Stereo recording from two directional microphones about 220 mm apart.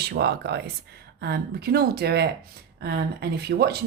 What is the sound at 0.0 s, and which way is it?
A woman's voice, 50° right (ahead or behind).